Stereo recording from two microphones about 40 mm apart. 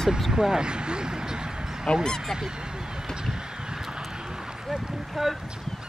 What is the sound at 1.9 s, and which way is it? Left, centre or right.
Speech, centre.